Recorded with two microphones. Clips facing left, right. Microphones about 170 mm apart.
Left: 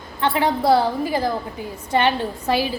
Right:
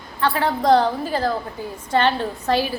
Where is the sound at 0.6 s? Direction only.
10° left (ahead or behind).